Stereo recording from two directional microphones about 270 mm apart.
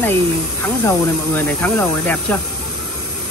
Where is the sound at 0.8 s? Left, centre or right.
Centre.